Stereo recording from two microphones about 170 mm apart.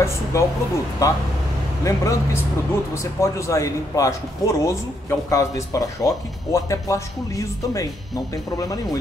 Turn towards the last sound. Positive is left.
turn(degrees=20)  # may be behind; listen again after turning